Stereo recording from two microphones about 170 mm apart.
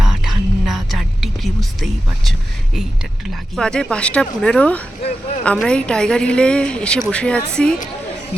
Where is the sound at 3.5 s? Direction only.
5° left (ahead or behind).